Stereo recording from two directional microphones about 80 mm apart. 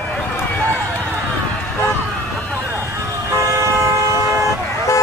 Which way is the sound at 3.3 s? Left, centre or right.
Right.